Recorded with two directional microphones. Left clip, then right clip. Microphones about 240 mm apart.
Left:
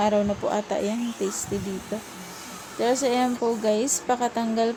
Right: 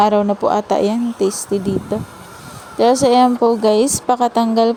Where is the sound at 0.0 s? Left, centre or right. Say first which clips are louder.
Right 9 dB; right.